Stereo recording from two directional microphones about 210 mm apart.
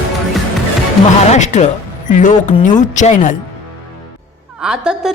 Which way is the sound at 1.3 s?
35° left (ahead or behind).